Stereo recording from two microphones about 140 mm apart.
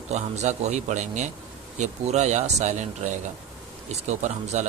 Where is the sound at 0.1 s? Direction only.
55° right (ahead or behind).